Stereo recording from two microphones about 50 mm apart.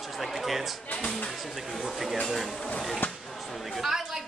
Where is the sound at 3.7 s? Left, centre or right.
Centre.